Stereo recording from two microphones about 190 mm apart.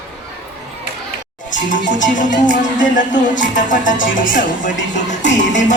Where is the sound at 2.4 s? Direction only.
40° left (ahead or behind).